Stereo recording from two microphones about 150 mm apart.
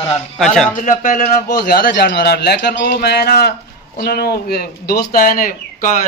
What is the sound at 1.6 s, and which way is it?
A man's voice, 90° left.